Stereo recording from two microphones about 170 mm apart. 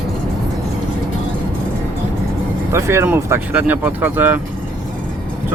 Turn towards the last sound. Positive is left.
turn(degrees=-10)  # may be behind; listen again after turning